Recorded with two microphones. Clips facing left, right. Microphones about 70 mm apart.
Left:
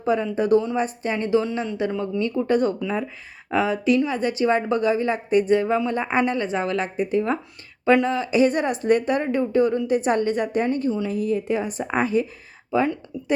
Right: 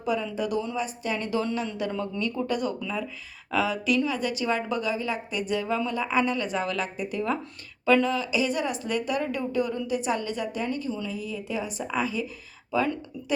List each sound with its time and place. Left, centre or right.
0.0 s a woman's voice: left
2.5 s a woman's voice: left
12.7 s a woman's voice: left